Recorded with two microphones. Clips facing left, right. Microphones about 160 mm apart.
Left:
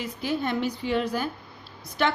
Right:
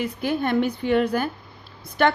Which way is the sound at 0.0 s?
55° right (ahead or behind).